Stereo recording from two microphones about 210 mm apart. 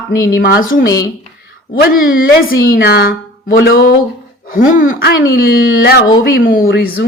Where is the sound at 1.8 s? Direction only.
45° left (ahead or behind).